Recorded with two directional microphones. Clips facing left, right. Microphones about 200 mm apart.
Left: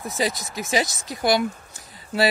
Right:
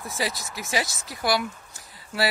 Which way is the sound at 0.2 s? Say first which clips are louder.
Left 5 dB; 20° left (ahead or behind).